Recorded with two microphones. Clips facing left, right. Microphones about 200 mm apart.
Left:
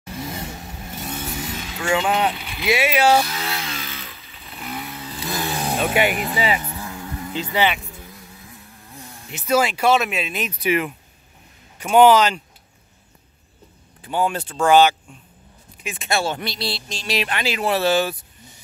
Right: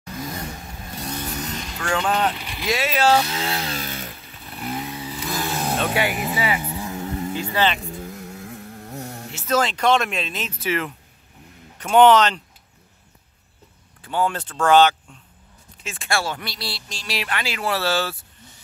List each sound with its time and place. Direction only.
0.0 s vehicle: 25° left (ahead or behind)
1.0 s vehicle: 5° left (ahead or behind)
3.3 s chainsaw: 25° right (ahead or behind); by 4.7 s 45° right (ahead or behind)
4.7 s vehicle: 15° right (ahead or behind)
5.3 s vehicle: centre (ahead or behind)
6.3 s speech: 20° left (ahead or behind)
6.6 s vehicle: 15° right (ahead or behind)
7.5 s speech: 10° left (ahead or behind)
7.9 s vehicle: 50° right (ahead or behind)
8.2 s a sound: 70° right (ahead or behind)
9.3 s speech: 10° left (ahead or behind)
14.0 s speech: 15° left (ahead or behind)